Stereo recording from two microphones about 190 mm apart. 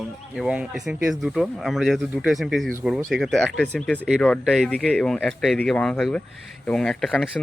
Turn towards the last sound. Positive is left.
turn(degrees=0)  # may be behind; listen again after turning